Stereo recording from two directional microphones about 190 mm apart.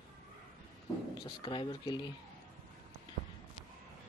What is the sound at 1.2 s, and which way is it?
Speech, 25° left (ahead or behind).